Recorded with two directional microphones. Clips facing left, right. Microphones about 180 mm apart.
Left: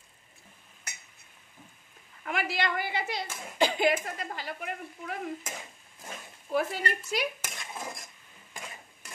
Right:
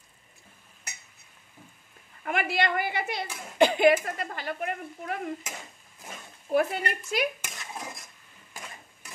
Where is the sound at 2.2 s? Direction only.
55° right (ahead or behind).